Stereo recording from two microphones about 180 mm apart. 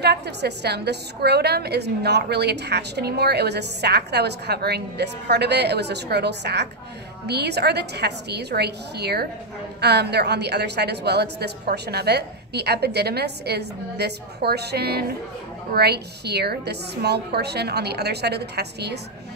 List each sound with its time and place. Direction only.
0.0 s a woman's voice: 65° right (ahead or behind)